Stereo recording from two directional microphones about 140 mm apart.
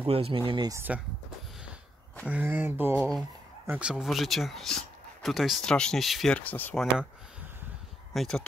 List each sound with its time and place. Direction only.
0.0 s speech: 45° right (ahead or behind)
0.5 s speech: 30° right (ahead or behind)
0.7 s speech: 10° right (ahead or behind)
2.2 s speech: 15° right (ahead or behind)
3.0 s speech: centre (ahead or behind)
8.1 s speech: centre (ahead or behind)